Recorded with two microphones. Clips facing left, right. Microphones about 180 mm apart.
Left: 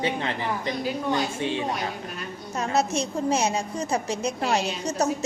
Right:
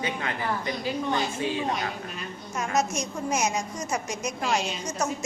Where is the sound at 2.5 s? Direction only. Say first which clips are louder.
Left 2 dB; 35° left (ahead or behind).